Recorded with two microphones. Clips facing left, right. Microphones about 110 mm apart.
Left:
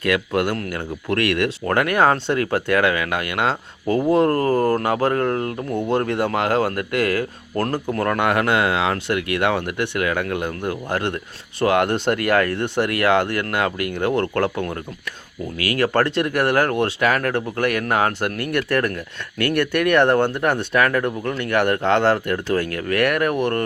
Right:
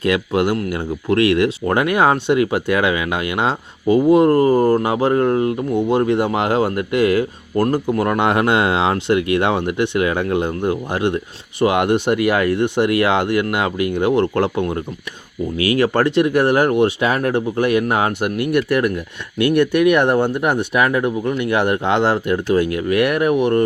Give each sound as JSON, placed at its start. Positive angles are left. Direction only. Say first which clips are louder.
{"t": 0.0, "sound": "speech", "louder": "right 3 dB", "side_deg": -20}